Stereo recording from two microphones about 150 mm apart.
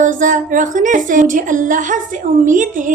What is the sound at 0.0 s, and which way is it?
A woman's voice, 60° right (ahead or behind).